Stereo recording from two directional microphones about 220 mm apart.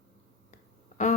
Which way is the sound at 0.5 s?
35° left (ahead or behind).